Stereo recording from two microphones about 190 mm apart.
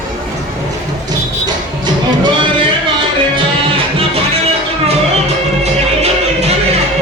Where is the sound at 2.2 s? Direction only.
25° right (ahead or behind).